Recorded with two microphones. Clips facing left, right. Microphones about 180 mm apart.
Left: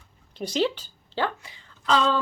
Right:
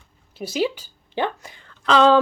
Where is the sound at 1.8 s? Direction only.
75° right (ahead or behind).